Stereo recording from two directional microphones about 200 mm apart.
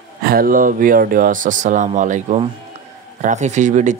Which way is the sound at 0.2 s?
45° right (ahead or behind).